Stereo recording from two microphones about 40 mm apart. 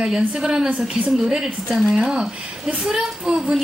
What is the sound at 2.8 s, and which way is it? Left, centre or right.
Speech, centre.